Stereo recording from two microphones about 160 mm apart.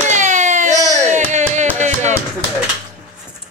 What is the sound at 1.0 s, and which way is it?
Carnatic music, 50° right (ahead or behind).